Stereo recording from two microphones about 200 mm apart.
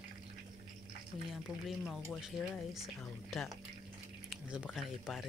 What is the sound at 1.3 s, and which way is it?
Speech, centre (ahead or behind).